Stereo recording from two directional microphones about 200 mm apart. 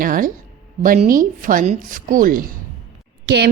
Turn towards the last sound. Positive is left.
turn(degrees=-55)  # may be behind; listen again after turning